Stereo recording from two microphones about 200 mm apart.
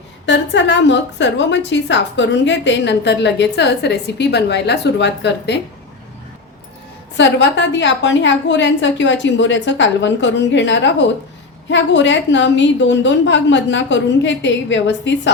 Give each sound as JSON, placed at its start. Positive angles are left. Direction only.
{"t": 0.3, "sound": "a woman's voice", "side_deg": 65}
{"t": 7.2, "sound": "a woman's voice", "side_deg": 60}